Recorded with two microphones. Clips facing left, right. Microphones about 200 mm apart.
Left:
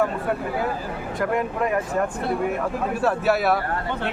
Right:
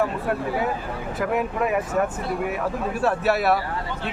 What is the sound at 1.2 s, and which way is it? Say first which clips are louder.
Speech: even; 5° right (ahead or behind).